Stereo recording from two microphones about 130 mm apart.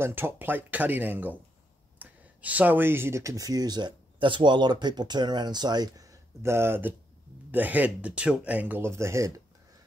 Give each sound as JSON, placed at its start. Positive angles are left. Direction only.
{"t": 0.0, "sound": "speech", "side_deg": -15}